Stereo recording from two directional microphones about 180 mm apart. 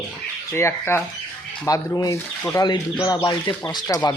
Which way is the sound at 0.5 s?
15° left (ahead or behind).